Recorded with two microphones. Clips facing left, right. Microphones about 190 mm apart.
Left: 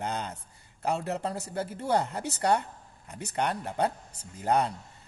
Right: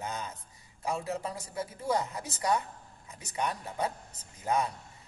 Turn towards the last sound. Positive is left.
turn(degrees=65)  # may be behind; listen again after turning